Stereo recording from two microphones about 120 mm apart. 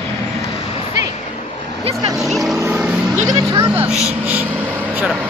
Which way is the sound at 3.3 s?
35° right (ahead or behind).